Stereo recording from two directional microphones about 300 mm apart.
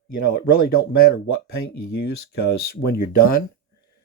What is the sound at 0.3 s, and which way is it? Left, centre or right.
Speech, left.